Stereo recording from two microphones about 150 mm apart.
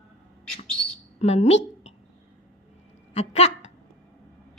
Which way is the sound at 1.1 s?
45° left (ahead or behind).